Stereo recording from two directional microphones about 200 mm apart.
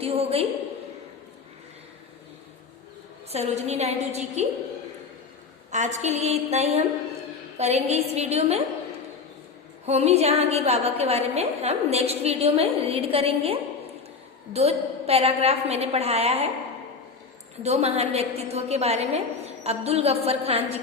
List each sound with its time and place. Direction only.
0.0 s a woman's voice: 30° right (ahead or behind)
3.2 s a woman's voice: 30° right (ahead or behind)
5.7 s a woman's voice: 35° right (ahead or behind)
9.8 s a woman's voice: 35° right (ahead or behind)
17.6 s a woman's voice: 30° right (ahead or behind)